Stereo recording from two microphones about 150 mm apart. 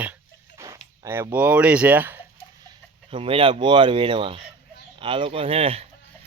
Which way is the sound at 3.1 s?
35° right (ahead or behind).